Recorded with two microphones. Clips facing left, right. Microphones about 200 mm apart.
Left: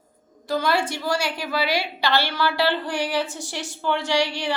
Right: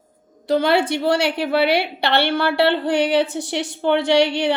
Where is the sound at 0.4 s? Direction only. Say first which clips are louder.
Right 6 dB; 65° right (ahead or behind).